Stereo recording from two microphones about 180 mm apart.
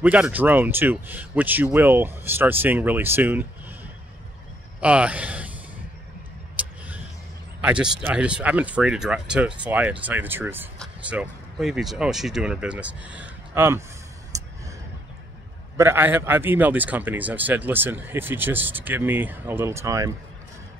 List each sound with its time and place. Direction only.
0.0 s a man's voice: 10° right (ahead or behind)
4.7 s speech: 5° right (ahead or behind)
6.6 s vehicle: 5° right (ahead or behind)
7.6 s a man's voice: 5° right (ahead or behind)
14.3 s a sound: 20° right (ahead or behind)
15.8 s a man's voice: 10° right (ahead or behind)